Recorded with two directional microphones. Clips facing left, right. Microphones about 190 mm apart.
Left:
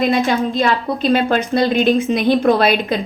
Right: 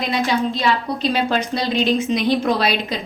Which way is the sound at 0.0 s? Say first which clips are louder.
Left 4 dB; 50° left (ahead or behind).